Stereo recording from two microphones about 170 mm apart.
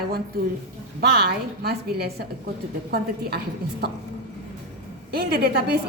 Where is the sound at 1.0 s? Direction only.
70° right (ahead or behind).